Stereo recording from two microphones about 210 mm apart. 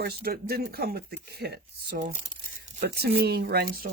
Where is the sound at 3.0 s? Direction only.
50° right (ahead or behind).